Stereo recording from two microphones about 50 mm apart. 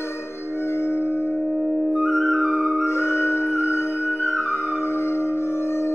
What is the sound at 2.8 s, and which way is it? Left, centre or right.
Music, left.